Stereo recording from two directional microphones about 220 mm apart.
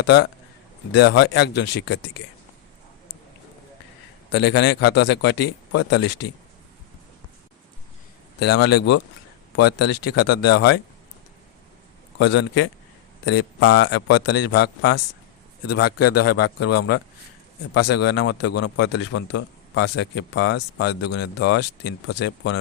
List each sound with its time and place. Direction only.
0.0 s speech: 50° left (ahead or behind)
4.3 s speech: 50° left (ahead or behind)
8.6 s speech: 50° left (ahead or behind)
12.2 s speech: 55° left (ahead or behind)
16.0 s a man's voice: 90° left
17.7 s speech: 50° left (ahead or behind)